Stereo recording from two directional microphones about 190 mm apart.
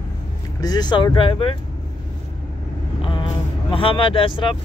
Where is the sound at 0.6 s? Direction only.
20° left (ahead or behind).